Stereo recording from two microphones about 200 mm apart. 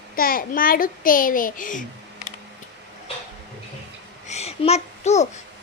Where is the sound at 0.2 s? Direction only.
45° left (ahead or behind).